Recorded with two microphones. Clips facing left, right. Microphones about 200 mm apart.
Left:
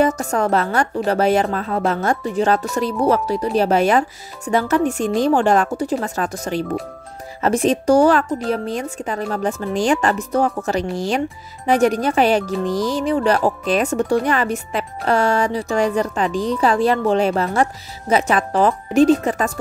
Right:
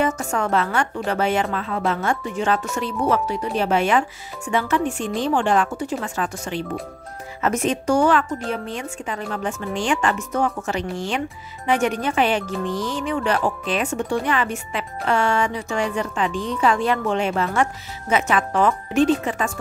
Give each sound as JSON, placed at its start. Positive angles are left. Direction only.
{"t": 0.0, "sound": "speech", "side_deg": 35}